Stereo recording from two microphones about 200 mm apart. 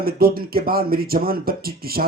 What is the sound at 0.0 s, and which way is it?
Speech, 50° right (ahead or behind).